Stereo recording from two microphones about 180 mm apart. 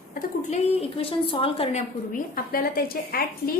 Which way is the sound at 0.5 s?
35° left (ahead or behind).